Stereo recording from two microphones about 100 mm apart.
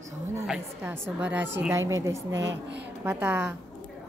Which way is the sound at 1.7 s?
30° right (ahead or behind).